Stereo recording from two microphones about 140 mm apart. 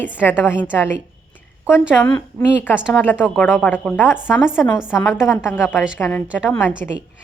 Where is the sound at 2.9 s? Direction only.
15° left (ahead or behind).